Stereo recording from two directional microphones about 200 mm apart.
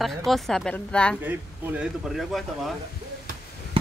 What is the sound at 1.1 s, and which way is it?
Speech, 10° right (ahead or behind).